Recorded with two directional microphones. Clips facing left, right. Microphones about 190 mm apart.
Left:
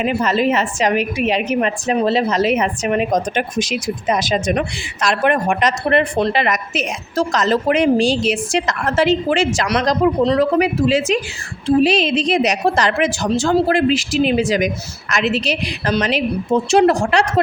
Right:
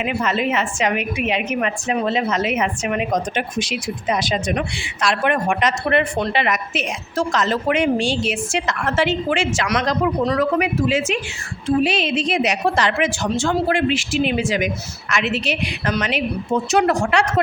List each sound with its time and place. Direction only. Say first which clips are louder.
0.0 s a woman's voice: left 4 dB; 35° left (ahead or behind)